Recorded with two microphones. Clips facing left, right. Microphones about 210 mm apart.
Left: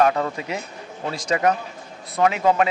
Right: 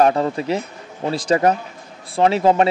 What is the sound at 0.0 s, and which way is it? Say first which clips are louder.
A man's voice: right 4 dB; 35° right (ahead or behind).